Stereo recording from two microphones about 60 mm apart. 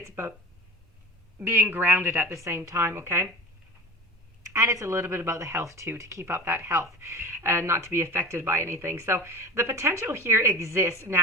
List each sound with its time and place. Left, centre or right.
0.0 s speech: right
1.5 s speech: right
2.3 s speech: right
4.4 s speech: right
6.2 s speech: right